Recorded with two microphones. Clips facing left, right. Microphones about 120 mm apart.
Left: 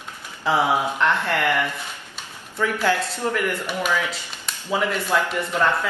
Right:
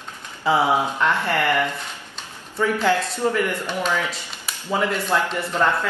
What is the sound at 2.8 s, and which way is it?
Speech, 15° right (ahead or behind).